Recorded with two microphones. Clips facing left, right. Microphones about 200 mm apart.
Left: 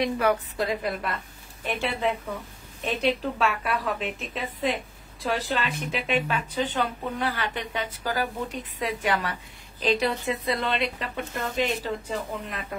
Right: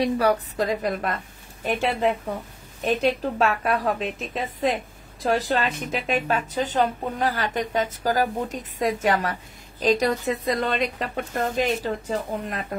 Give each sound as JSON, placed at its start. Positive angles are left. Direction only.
{"t": 0.0, "sound": "a woman's voice", "side_deg": -40}
{"t": 5.2, "sound": "a woman's voice", "side_deg": -40}